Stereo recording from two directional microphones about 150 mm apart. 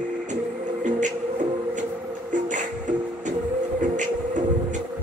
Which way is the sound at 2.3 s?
55° right (ahead or behind).